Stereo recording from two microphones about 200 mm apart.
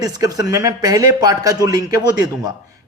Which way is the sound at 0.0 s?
20° right (ahead or behind).